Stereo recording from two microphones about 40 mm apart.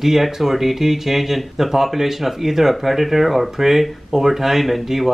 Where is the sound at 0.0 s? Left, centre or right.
Centre.